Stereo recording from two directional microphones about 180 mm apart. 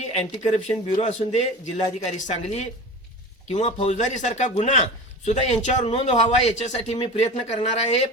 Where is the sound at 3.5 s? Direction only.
35° left (ahead or behind).